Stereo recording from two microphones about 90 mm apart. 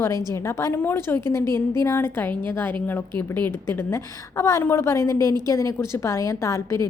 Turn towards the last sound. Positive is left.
turn(degrees=35)  # may be behind; listen again after turning